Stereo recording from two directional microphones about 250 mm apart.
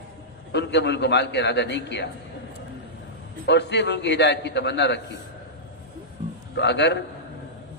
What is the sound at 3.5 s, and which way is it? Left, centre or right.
A man's voice, left.